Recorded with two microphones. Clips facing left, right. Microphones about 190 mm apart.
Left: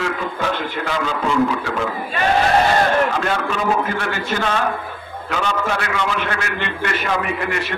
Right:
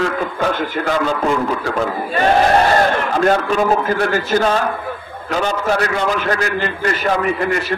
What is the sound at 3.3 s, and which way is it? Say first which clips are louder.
A man's voice: right 5 dB; 40° right (ahead or behind).